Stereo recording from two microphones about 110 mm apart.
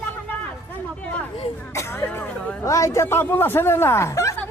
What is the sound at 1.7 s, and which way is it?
Speech, 25° left (ahead or behind).